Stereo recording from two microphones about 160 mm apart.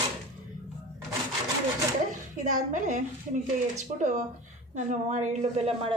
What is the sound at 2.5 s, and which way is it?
A woman's voice, 50° right (ahead or behind).